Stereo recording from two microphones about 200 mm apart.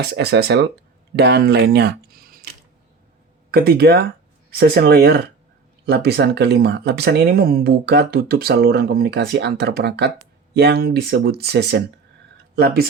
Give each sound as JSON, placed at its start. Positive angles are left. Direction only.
{"t": 0.0, "sound": "speech", "side_deg": -55}
{"t": 3.5, "sound": "speech", "side_deg": -50}